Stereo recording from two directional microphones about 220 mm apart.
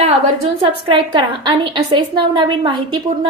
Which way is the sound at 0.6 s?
25° right (ahead or behind).